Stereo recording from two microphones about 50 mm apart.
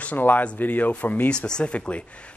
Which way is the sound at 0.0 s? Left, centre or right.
Left.